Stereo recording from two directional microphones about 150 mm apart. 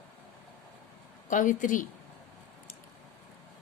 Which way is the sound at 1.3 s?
60° left (ahead or behind).